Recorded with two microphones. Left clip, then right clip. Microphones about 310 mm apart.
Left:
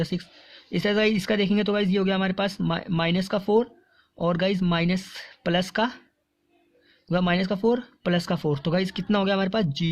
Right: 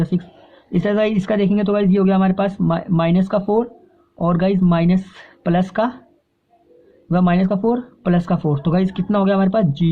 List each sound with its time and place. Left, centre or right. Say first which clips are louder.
0.1 s speech: right 8 dB; left
7.1 s speech: right 6 dB; left